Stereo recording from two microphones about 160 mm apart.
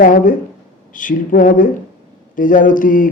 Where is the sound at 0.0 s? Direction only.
55° left (ahead or behind).